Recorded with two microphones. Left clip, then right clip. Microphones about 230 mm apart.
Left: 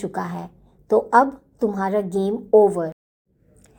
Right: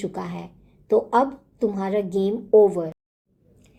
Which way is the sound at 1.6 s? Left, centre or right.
Left.